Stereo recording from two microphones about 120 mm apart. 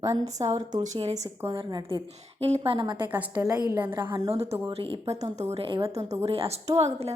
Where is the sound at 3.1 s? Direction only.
15° right (ahead or behind).